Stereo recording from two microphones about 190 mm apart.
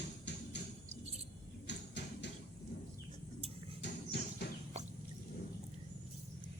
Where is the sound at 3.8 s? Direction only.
65° left (ahead or behind).